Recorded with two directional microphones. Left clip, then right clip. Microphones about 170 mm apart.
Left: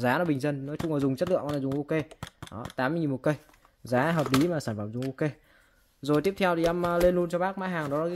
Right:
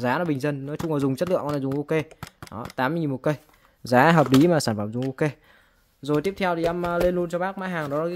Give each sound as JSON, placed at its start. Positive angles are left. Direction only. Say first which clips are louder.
{"t": 0.0, "sound": "speech", "louder": "right 2 dB", "side_deg": -10}
{"t": 3.8, "sound": "speech", "louder": "right 9 dB", "side_deg": -40}
{"t": 6.0, "sound": "speech", "louder": "right 1 dB", "side_deg": -5}